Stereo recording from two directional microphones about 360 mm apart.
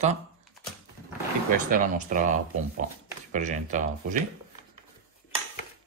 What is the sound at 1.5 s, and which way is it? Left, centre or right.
Speech, right.